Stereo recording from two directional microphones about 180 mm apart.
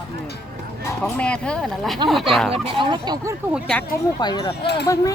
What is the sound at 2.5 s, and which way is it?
Speech, 25° right (ahead or behind).